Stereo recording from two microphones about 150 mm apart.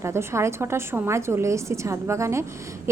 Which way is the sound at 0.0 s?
15° right (ahead or behind).